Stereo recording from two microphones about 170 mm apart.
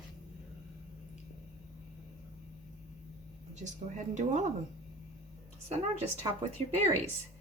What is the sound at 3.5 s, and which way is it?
Speech, 45° right (ahead or behind).